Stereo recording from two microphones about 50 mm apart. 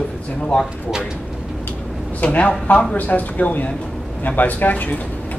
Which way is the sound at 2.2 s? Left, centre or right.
Left.